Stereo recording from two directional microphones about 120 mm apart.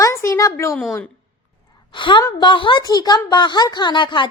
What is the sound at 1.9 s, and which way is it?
A woman's voice, 40° left (ahead or behind).